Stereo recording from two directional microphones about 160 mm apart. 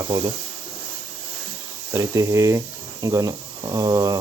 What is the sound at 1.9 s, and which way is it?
Speech, 20° right (ahead or behind).